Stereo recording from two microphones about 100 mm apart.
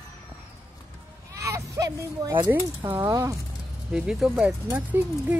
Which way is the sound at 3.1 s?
30° right (ahead or behind).